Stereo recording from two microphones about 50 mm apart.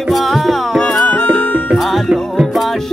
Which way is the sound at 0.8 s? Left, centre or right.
Centre.